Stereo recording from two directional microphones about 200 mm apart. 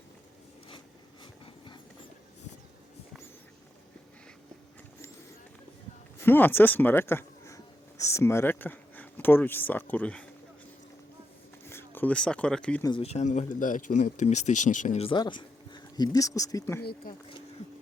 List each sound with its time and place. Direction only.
1.2 s a sound: 25° left (ahead or behind)
6.2 s speech: 10° left (ahead or behind)
11.7 s speech: 10° left (ahead or behind)
12.8 s speech: 25° left (ahead or behind)
16.8 s speech: 45° left (ahead or behind)